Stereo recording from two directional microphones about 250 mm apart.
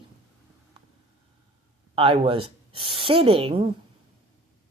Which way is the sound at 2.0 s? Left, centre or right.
Right.